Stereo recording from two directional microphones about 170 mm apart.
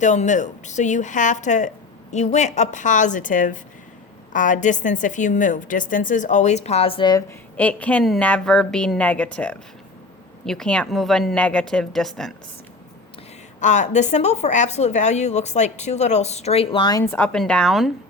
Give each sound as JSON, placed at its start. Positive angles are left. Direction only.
{"t": 0.0, "sound": "a woman's voice", "side_deg": 45}
{"t": 7.5, "sound": "a woman's voice", "side_deg": 10}
{"t": 13.6, "sound": "a woman's voice", "side_deg": 45}
{"t": 17.0, "sound": "a woman's voice", "side_deg": 10}